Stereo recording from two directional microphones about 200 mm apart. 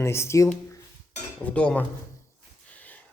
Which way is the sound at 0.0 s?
15° left (ahead or behind).